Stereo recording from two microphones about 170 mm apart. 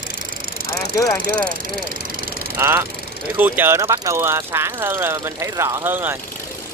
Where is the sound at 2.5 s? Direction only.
15° right (ahead or behind).